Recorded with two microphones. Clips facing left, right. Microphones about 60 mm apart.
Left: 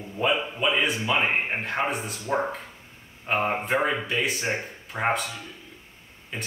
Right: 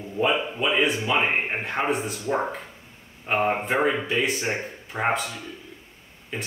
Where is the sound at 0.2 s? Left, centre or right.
Centre.